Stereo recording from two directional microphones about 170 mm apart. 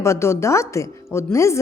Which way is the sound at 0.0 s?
15° left (ahead or behind).